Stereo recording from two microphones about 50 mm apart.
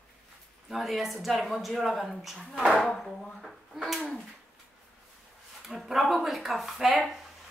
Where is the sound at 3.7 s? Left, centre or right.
Centre.